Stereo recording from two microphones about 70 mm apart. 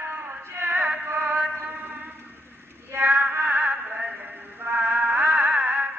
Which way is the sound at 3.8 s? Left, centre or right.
Centre.